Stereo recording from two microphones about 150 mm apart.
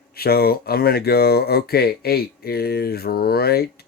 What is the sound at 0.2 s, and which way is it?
Speech, 90° left.